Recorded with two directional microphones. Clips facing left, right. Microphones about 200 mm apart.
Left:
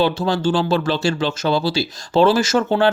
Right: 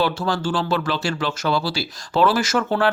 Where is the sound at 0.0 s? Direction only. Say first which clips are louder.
Left 4 dB; 20° left (ahead or behind).